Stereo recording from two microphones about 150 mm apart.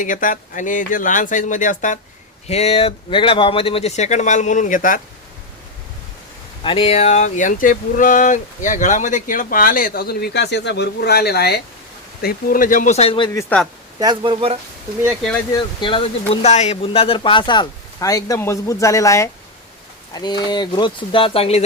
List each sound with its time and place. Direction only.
0.0 s speech: 60° left (ahead or behind)
2.5 s speech: 45° left (ahead or behind); by 4.9 s 60° left (ahead or behind)
6.6 s speech: 35° left (ahead or behind); by 11.6 s 90° left
12.2 s speech: 65° left (ahead or behind); by 13.1 s 45° left (ahead or behind)
13.5 s speech: 10° left (ahead or behind)
14.0 s speech: 30° right (ahead or behind)
15.5 s speech: 35° left (ahead or behind)
16.3 s speech: 45° left (ahead or behind)